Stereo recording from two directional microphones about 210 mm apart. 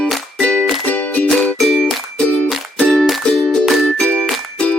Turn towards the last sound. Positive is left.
turn(degrees=5)  # may be behind; listen again after turning